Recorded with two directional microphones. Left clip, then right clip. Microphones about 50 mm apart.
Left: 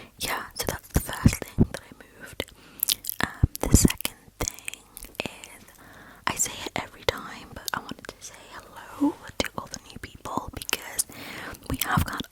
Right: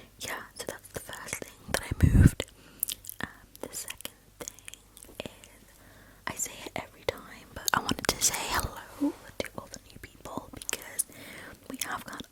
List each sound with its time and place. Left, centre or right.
0.2 s whispering: left
1.7 s whispering: right
2.0 s whispering: right
2.8 s biting: left
3.5 s whispering: left
3.8 s whispering: left
7.6 s whispering: centre
8.0 s whispering: right
8.9 s whispering: left
9.2 s whispering: left
10.6 s whispering: left